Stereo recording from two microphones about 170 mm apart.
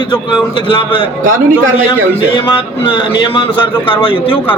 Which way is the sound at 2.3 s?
30° left (ahead or behind).